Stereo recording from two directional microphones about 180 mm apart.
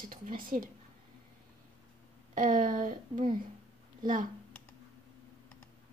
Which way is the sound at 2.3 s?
45° right (ahead or behind).